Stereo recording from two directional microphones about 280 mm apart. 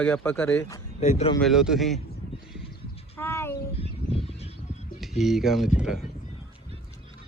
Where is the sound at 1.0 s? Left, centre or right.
Left.